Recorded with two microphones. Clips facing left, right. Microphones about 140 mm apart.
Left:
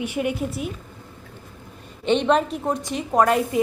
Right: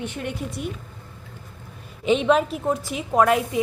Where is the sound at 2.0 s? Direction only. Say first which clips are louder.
Even; 5° right (ahead or behind).